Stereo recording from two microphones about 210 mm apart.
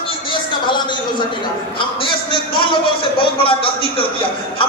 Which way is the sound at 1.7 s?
25° left (ahead or behind).